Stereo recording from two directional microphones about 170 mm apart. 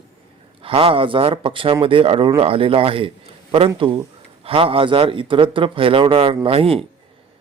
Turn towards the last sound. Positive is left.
turn(degrees=-35)  # may be behind; listen again after turning